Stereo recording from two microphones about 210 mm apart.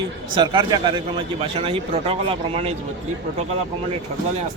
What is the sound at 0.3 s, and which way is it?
A man's voice, 20° right (ahead or behind).